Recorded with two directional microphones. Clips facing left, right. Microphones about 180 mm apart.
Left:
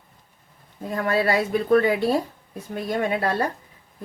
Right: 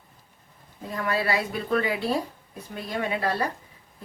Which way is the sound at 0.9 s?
45° left (ahead or behind).